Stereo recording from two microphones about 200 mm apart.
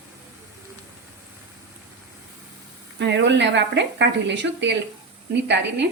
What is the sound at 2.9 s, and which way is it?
Speech, 60° right (ahead or behind).